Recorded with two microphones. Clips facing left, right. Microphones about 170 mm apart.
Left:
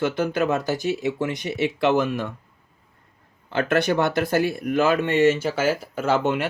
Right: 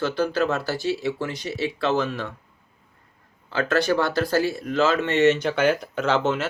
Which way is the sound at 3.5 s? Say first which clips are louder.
Left 1 dB; 20° left (ahead or behind).